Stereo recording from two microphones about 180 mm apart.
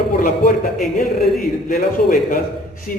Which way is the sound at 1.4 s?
50° left (ahead or behind).